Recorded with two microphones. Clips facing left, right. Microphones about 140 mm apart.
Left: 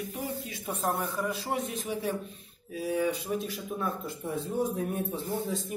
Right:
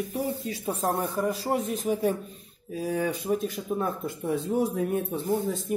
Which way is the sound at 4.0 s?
85° right.